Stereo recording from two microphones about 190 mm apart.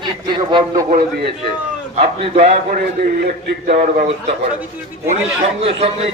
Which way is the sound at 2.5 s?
50° right (ahead or behind).